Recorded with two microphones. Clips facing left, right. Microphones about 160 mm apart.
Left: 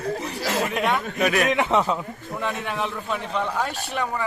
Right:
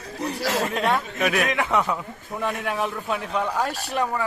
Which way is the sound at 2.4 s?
5° right (ahead or behind).